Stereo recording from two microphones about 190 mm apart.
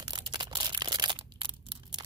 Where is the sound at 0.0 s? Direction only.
20° right (ahead or behind).